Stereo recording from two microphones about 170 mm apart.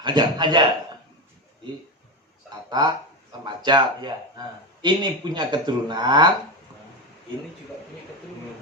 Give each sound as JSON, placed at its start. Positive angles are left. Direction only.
{"t": 0.0, "sound": "speech", "side_deg": -25}
{"t": 2.6, "sound": "speech", "side_deg": -25}